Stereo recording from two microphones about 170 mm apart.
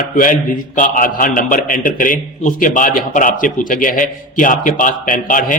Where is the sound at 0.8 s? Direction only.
55° left (ahead or behind).